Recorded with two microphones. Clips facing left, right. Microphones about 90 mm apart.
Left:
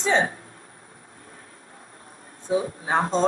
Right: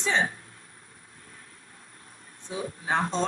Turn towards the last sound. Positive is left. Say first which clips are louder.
# left 4 dB
turn(degrees=35)  # may be behind; listen again after turning